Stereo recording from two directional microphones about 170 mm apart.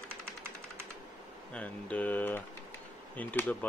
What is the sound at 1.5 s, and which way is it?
Speech, 10° left (ahead or behind).